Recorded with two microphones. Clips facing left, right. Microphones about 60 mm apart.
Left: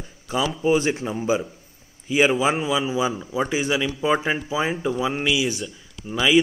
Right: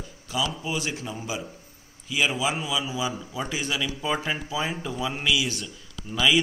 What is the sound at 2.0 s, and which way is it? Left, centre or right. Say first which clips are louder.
A man's voice: left 7 dB; left.